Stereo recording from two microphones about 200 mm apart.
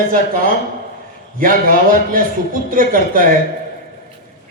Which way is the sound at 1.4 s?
45° right (ahead or behind).